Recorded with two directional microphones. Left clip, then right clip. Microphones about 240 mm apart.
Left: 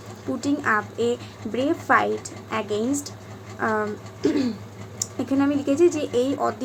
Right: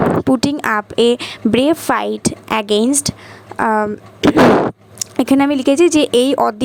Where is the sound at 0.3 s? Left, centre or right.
Right.